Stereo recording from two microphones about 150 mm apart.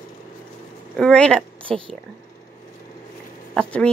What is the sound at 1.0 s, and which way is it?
Speech, 5° left (ahead or behind).